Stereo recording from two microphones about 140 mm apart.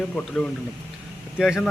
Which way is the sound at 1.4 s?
5° right (ahead or behind).